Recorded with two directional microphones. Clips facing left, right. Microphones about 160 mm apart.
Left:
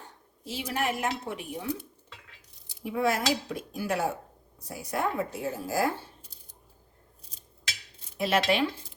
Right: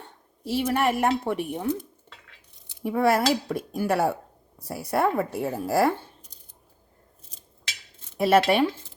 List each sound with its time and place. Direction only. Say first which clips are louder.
0.0 s a woman's voice: right 6 dB; 65° right (ahead or behind)
2.8 s speech: right 6 dB; 60° right (ahead or behind)
8.2 s speech: right 6 dB; 55° right (ahead or behind)